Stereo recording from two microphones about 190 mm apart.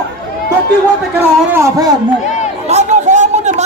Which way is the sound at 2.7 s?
40° right (ahead or behind).